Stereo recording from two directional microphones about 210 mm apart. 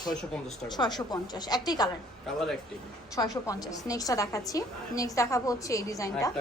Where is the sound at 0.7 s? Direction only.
20° left (ahead or behind).